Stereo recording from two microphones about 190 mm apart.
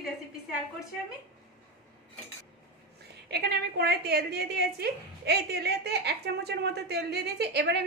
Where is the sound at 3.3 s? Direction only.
60° right (ahead or behind).